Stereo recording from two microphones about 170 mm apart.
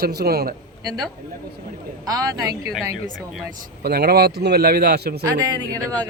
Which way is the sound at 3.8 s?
70° right (ahead or behind).